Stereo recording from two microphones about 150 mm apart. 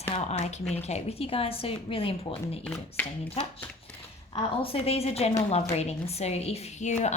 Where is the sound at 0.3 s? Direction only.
50° left (ahead or behind).